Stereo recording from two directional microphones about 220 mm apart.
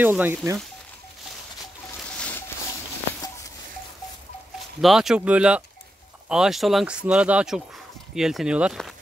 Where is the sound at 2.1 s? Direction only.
5° left (ahead or behind).